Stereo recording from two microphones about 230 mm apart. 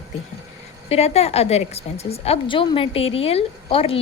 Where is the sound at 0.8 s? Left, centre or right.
Left.